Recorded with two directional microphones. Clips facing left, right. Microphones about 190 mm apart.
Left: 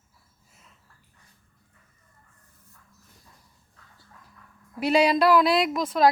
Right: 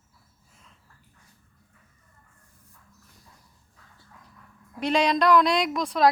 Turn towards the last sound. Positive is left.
turn(degrees=0)  # may be behind; listen again after turning